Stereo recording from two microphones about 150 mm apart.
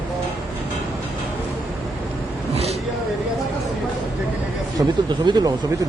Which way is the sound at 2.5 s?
45° right (ahead or behind).